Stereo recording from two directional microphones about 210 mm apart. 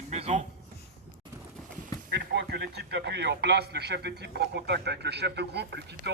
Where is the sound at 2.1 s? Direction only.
55° right (ahead or behind).